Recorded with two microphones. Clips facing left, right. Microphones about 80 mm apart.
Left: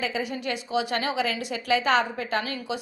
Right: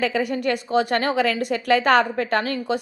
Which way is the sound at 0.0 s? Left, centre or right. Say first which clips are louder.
Right 7 dB; right.